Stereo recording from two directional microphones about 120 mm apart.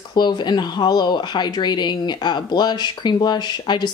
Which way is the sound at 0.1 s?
40° left (ahead or behind).